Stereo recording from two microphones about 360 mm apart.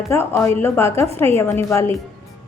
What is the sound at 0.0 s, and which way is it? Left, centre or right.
A woman's voice, centre.